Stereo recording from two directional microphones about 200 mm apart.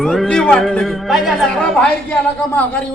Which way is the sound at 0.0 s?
Centre (ahead or behind).